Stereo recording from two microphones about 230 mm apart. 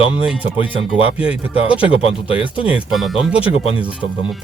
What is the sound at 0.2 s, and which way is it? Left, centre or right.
Speech, centre.